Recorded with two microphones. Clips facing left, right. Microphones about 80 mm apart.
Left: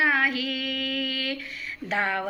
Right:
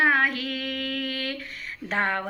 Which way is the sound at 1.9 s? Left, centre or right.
Right.